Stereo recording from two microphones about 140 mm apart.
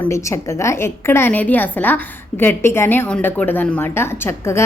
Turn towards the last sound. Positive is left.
turn(degrees=15)  # may be behind; listen again after turning